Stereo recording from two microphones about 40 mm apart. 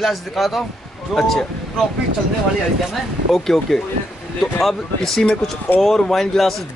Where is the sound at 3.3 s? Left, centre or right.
Centre.